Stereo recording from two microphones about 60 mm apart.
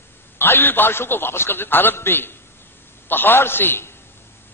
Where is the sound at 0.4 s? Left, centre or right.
Left.